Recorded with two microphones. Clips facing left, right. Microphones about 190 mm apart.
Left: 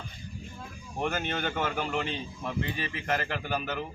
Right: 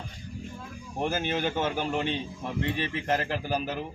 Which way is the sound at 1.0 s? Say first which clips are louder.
Right 3 dB; 30° right (ahead or behind).